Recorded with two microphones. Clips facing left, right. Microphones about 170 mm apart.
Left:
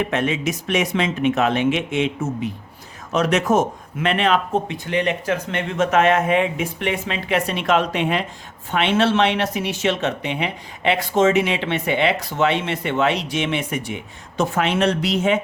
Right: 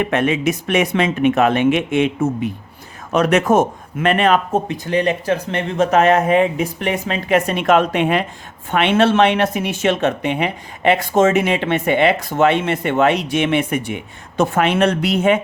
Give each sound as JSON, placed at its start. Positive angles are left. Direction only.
{"t": 0.0, "sound": "speech", "side_deg": -60}